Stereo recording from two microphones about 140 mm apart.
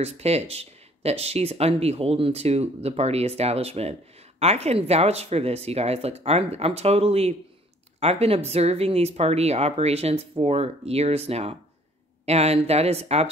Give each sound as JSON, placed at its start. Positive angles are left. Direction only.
{"t": 0.0, "sound": "speech", "side_deg": -50}